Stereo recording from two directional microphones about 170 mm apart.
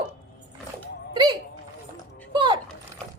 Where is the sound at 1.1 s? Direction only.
25° right (ahead or behind).